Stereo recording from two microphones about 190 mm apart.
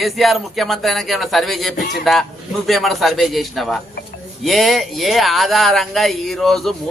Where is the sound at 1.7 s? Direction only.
45° left (ahead or behind).